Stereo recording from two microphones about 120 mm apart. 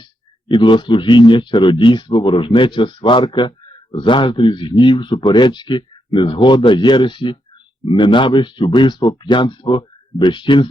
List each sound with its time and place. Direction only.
0.0 s a man's voice: 40° left (ahead or behind)